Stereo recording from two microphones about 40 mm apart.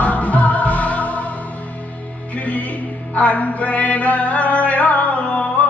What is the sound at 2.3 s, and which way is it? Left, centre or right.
Music, left.